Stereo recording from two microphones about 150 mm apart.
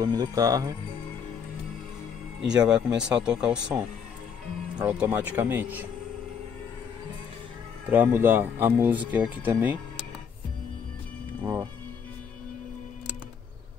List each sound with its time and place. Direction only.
0.0 s speech: 25° right (ahead or behind)
2.4 s speech: 5° right (ahead or behind)
7.9 s speech: 15° right (ahead or behind)
11.4 s speech: 20° right (ahead or behind)